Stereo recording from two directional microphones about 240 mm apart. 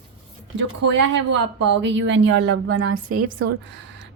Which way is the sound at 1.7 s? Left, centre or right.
Right.